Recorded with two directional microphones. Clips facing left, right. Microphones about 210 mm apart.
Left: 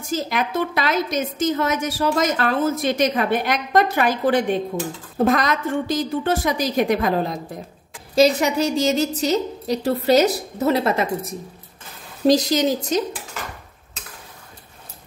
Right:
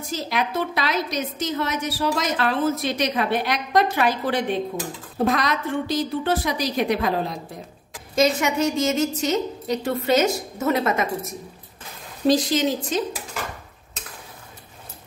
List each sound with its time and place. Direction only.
0.1 s a woman's voice: 50° left (ahead or behind)
8.1 s a woman's voice: 35° left (ahead or behind)